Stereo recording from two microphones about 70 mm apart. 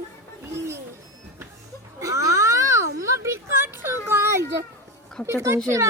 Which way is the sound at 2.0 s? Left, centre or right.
Right.